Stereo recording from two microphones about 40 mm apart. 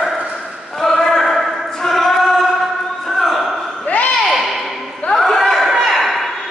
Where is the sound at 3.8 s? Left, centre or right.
Left.